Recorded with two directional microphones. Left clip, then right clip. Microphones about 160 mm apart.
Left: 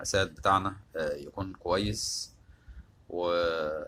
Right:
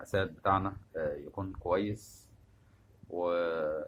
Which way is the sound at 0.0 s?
40° left (ahead or behind).